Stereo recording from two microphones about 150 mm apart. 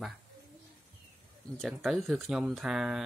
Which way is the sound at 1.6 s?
Centre (ahead or behind).